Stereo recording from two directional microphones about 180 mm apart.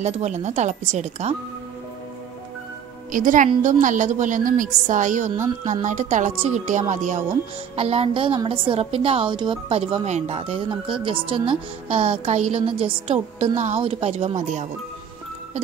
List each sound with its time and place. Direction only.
0.0 s a woman's voice: 40° right (ahead or behind)
3.1 s a woman's voice: 50° right (ahead or behind)
7.7 s a woman's voice: 30° right (ahead or behind)